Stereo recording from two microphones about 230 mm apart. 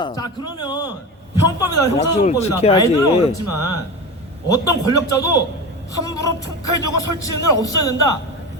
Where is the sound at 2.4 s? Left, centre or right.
Left.